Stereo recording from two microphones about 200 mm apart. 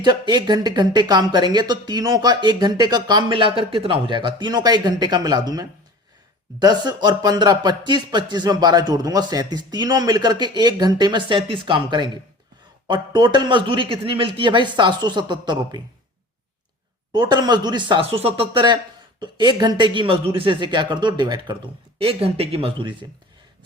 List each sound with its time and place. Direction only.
0.0 s speech: 20° right (ahead or behind)
17.1 s speech: 20° right (ahead or behind)